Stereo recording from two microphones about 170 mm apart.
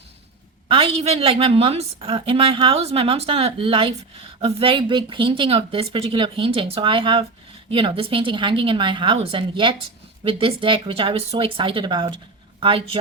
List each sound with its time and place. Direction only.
0.7 s a woman's voice: 35° right (ahead or behind)